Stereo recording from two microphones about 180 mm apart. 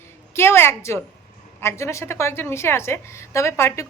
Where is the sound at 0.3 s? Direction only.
15° left (ahead or behind).